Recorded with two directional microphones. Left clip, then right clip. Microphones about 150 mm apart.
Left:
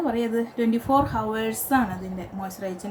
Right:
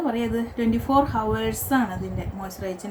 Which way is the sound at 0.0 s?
5° left (ahead or behind).